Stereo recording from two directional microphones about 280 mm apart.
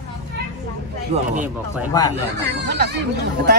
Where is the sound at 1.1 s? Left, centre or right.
Right.